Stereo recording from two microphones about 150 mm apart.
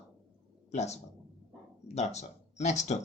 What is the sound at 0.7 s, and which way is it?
Speech, 50° left (ahead or behind).